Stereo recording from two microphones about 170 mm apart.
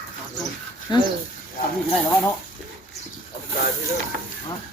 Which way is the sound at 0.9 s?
25° left (ahead or behind).